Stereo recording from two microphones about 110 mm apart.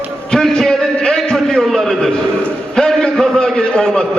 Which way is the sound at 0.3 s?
5° left (ahead or behind).